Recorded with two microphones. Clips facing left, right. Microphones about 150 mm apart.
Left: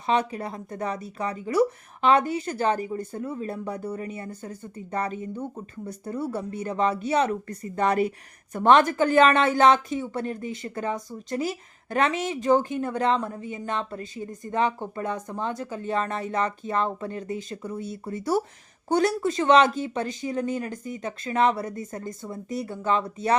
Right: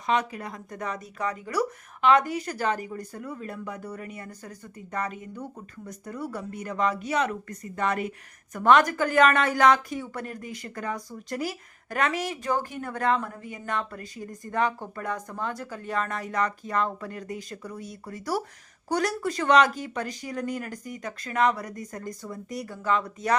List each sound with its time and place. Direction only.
0.1 s a woman's voice: 30° left (ahead or behind)